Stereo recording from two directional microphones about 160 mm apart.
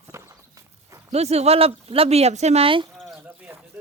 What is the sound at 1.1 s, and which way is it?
Speech, 40° right (ahead or behind).